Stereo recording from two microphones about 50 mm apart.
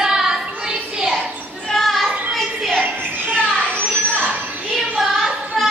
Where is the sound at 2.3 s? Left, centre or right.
Centre.